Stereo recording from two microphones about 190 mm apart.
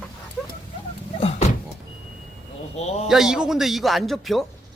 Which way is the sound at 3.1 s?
5° right (ahead or behind).